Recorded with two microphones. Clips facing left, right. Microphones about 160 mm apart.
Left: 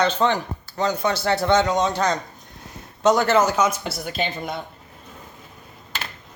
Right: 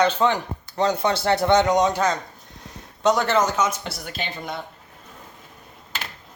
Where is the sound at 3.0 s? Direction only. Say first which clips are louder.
Left 2 dB; centre (ahead or behind).